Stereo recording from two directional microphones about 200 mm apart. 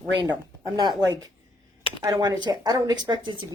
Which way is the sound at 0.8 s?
20° right (ahead or behind).